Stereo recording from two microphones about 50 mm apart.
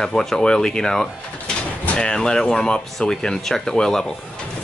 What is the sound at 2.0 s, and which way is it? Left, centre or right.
Speech, centre.